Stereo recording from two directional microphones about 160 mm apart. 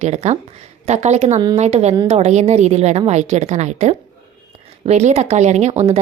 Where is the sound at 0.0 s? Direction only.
45° right (ahead or behind).